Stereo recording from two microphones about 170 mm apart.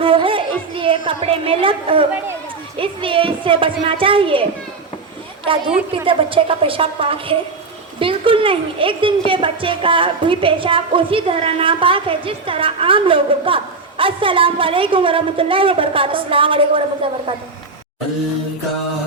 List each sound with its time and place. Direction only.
0.0 s a sound: 30° right (ahead or behind)
2.7 s a woman's voice: 30° right (ahead or behind)
5.5 s a woman's voice: 30° right (ahead or behind)